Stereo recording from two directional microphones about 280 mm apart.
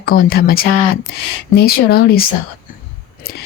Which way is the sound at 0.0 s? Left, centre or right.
Left.